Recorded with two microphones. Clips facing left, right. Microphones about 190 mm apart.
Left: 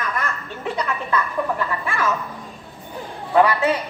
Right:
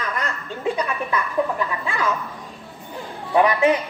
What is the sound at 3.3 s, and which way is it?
Speech, 20° right (ahead or behind).